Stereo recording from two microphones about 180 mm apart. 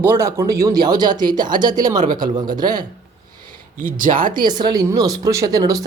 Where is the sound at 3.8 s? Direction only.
50° right (ahead or behind).